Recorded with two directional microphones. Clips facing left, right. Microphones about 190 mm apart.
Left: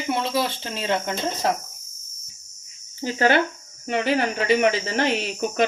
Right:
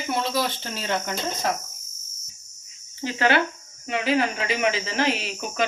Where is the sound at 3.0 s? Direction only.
45° left (ahead or behind).